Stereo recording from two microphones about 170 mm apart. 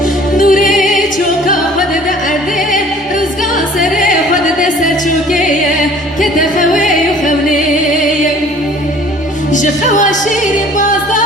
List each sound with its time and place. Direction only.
0.3 s music: 50° left (ahead or behind)
3.9 s music: 50° left (ahead or behind)
6.3 s music: 50° left (ahead or behind)
9.5 s music: 50° left (ahead or behind)